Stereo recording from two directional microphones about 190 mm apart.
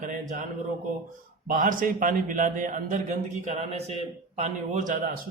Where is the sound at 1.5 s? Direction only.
45° right (ahead or behind).